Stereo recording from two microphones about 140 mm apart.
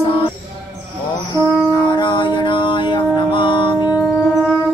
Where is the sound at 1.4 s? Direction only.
30° left (ahead or behind).